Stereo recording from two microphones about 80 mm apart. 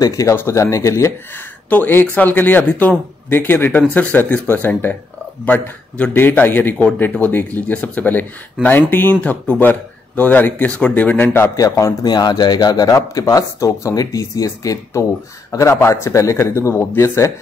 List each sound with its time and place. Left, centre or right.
0.0 s a man's voice: left
1.7 s speech: left
6.1 s speech: left
11.3 s speech: left
12.1 s a man's voice: left